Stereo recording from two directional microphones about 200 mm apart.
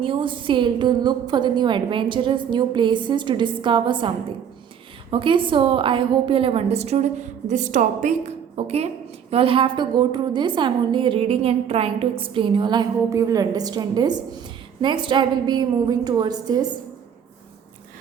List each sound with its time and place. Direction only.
0.0 s a woman's voice: 25° right (ahead or behind)
5.1 s a woman's voice: 25° right (ahead or behind)